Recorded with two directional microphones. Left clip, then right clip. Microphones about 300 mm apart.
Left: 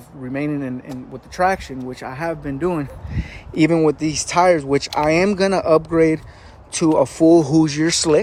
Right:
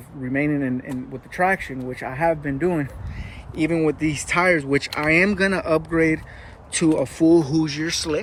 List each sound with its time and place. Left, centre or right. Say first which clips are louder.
0.3 s speech: right 1 dB; centre
3.2 s speech: left 7 dB; left